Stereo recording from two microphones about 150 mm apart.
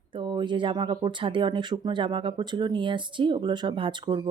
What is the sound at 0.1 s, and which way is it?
A woman's voice, 35° right (ahead or behind).